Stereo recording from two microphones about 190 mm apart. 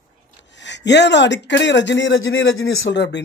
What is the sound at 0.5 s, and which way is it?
A man's voice, 70° left (ahead or behind).